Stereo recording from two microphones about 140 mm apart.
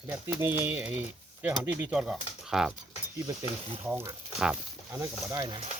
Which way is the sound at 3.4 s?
40° right (ahead or behind).